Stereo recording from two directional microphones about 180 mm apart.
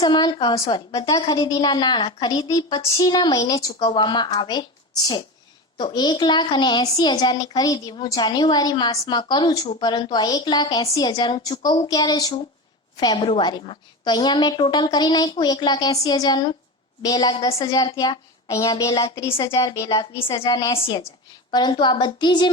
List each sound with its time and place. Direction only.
0.0 s a woman's voice: 25° left (ahead or behind)
5.7 s a woman's voice: 25° left (ahead or behind)